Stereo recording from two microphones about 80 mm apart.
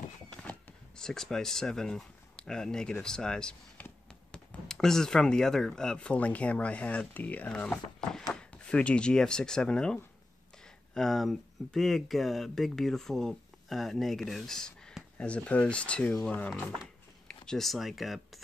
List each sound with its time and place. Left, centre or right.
0.4 s speech: centre
11.0 s speech: centre
16.8 s a sound: centre